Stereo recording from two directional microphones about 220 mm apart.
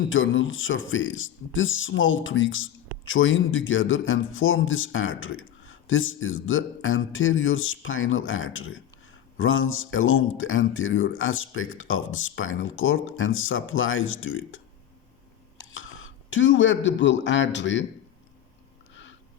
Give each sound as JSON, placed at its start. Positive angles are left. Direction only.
{"t": 0.1, "sound": "speech", "side_deg": 60}
{"t": 15.7, "sound": "a sound", "side_deg": 65}
{"t": 17.2, "sound": "speech", "side_deg": 55}